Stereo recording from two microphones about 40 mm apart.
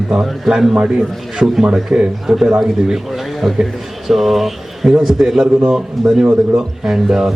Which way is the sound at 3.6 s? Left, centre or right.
Centre.